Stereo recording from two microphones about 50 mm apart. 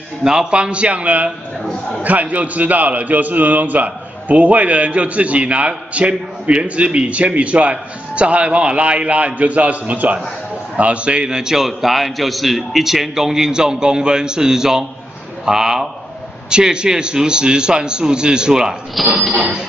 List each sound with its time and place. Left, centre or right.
0.2 s a man's voice: centre
19.0 s a sound: centre
19.3 s a man's voice: right